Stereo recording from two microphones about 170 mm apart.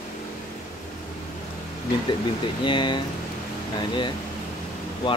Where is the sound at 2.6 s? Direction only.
30° left (ahead or behind).